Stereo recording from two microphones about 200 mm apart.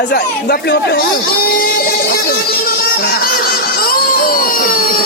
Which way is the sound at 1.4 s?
50° left (ahead or behind).